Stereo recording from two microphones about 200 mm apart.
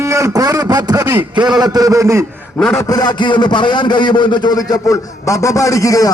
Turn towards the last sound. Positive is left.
turn(degrees=15)  # may be behind; listen again after turning